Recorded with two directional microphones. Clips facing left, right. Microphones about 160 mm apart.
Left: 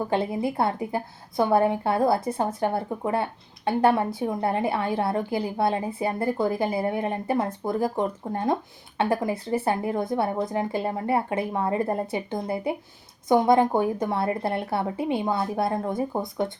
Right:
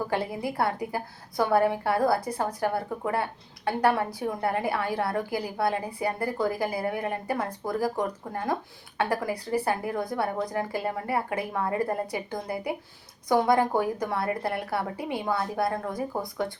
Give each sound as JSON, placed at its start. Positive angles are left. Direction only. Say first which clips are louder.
{"t": 0.1, "sound": "a woman's voice", "louder": "left 4 dB", "side_deg": 25}